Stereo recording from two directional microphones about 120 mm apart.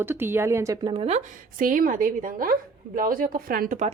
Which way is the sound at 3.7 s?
90° right.